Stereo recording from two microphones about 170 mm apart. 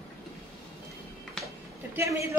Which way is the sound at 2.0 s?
15° right (ahead or behind).